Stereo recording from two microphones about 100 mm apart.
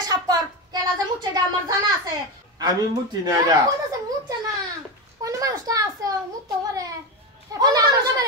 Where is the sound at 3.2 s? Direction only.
35° right (ahead or behind).